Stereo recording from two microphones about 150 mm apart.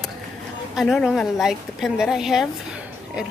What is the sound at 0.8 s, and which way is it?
Speech, centre (ahead or behind).